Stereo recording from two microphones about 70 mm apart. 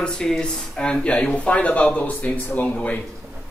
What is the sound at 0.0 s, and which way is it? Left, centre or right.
Speech, centre.